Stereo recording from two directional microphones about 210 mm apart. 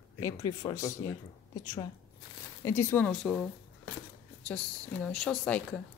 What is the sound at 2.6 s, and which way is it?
Speech, 10° left (ahead or behind).